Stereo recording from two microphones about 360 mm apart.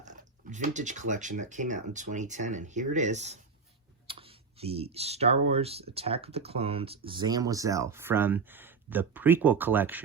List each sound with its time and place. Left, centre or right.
0.0 s speech: centre